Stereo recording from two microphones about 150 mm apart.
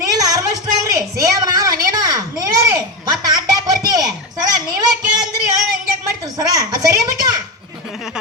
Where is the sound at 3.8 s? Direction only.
25° right (ahead or behind).